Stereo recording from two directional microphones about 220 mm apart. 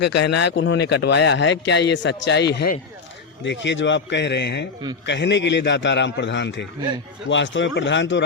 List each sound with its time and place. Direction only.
0.0 s speech: 50° left (ahead or behind)